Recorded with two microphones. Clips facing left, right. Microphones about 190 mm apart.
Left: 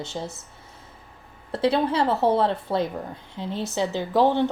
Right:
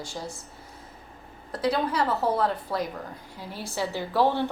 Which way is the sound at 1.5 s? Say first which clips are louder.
Left 4 dB; 30° left (ahead or behind).